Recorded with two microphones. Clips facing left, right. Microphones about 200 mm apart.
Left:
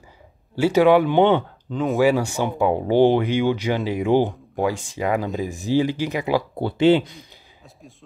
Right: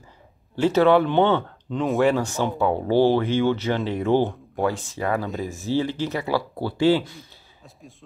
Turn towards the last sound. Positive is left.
turn(degrees=20)  # may be behind; listen again after turning